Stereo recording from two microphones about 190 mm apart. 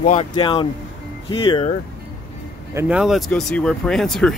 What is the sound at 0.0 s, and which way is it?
Speech, 35° left (ahead or behind).